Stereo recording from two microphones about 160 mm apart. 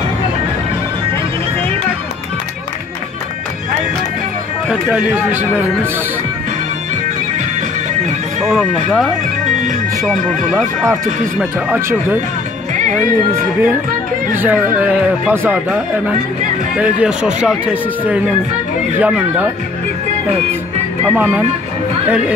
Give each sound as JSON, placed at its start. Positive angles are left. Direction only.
{"t": 4.6, "sound": "speech", "side_deg": 0}
{"t": 8.5, "sound": "speech", "side_deg": -5}
{"t": 9.4, "sound": "music", "side_deg": -50}
{"t": 11.3, "sound": "speech", "side_deg": -10}
{"t": 12.7, "sound": "music", "side_deg": -50}
{"t": 13.3, "sound": "speech", "side_deg": -10}
{"t": 21.1, "sound": "speech", "side_deg": -10}